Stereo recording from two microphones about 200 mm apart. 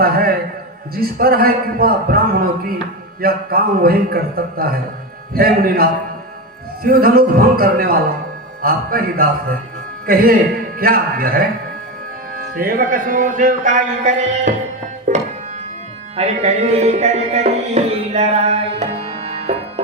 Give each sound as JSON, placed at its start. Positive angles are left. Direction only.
{"t": 0.0, "sound": "a sound", "side_deg": -50}
{"t": 0.9, "sound": "a man's voice", "side_deg": -50}
{"t": 12.5, "sound": "a man's voice", "side_deg": -45}
{"t": 15.1, "sound": "music", "side_deg": -40}